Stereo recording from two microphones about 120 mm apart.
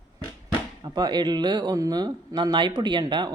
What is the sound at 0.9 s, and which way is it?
Speech, 35° right (ahead or behind).